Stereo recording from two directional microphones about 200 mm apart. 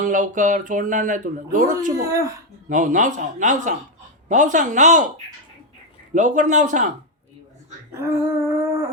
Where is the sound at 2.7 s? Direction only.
40° right (ahead or behind).